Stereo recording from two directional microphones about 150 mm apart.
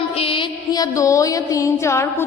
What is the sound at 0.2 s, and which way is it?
Music, 35° left (ahead or behind).